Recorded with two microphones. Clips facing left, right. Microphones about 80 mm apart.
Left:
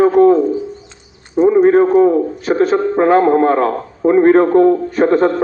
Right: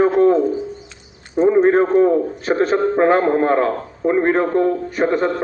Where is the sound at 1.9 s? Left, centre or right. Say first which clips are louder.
Left 2 dB; centre.